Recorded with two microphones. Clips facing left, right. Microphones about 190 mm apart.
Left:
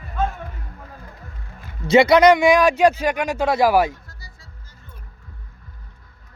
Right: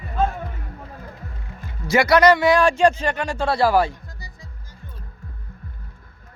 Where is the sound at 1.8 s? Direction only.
20° left (ahead or behind).